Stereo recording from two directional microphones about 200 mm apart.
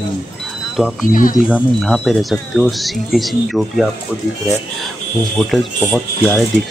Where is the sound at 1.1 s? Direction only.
40° left (ahead or behind).